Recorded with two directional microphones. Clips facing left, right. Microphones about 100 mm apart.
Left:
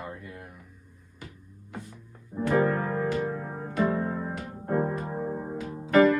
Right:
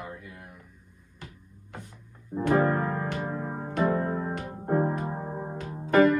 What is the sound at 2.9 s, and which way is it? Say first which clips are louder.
Music: left 3 dB; 15° right (ahead or behind).